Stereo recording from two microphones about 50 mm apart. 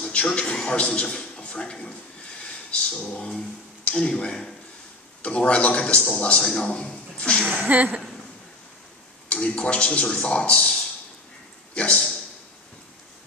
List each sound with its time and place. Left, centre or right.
0.0 s a man's voice: left
7.6 s speech: right
9.3 s a man's voice: centre
11.7 s a sound: left